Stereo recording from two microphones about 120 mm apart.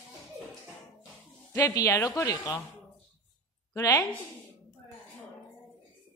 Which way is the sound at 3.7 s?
25° left (ahead or behind).